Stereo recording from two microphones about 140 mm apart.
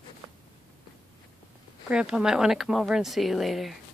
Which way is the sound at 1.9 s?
5° right (ahead or behind).